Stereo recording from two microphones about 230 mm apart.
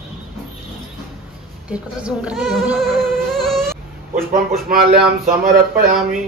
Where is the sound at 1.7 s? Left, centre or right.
Centre.